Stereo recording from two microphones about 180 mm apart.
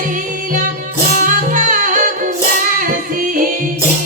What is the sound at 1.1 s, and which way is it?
Music, 45° right (ahead or behind).